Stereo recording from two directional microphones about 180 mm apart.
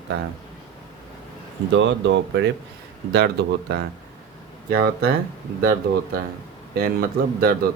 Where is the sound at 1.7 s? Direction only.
90° right.